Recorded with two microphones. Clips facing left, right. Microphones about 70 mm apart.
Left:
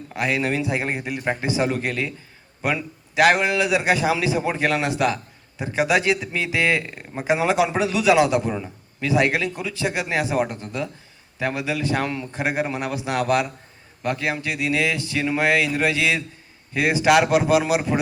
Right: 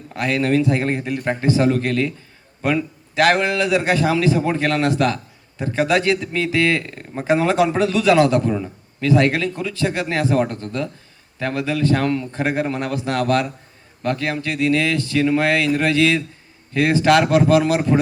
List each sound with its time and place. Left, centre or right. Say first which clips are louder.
0.1 s a man's voice: right 4 dB; centre